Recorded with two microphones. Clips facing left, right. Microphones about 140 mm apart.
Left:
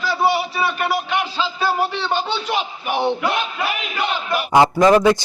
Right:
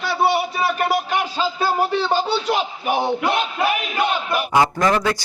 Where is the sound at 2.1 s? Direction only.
40° right (ahead or behind).